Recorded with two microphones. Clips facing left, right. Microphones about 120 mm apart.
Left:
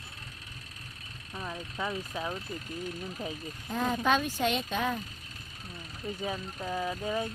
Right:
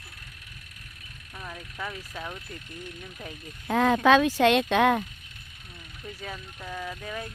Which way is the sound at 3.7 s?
90° right.